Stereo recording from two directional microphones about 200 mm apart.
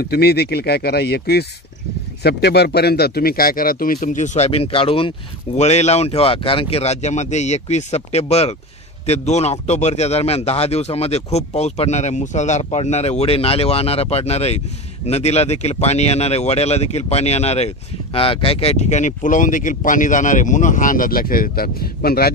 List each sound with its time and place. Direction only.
0.0 s speech: 50° left (ahead or behind)